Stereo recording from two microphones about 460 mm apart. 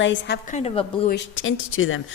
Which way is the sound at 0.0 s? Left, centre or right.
Left.